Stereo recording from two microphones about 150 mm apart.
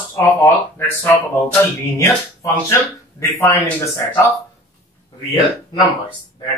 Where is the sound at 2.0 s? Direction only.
20° left (ahead or behind).